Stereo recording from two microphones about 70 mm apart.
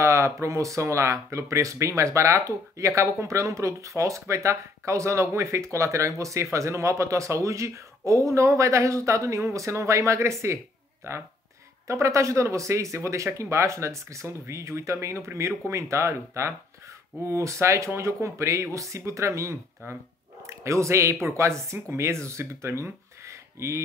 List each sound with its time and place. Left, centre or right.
0.0 s speech: right